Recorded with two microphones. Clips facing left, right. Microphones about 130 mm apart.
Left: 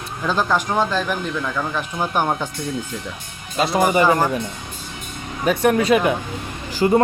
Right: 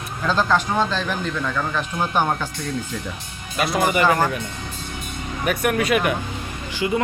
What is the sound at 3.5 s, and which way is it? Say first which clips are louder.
Speech: left 3 dB; 25° left (ahead or behind).